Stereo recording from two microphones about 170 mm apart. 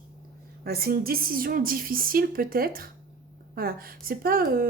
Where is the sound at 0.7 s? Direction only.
65° right (ahead or behind).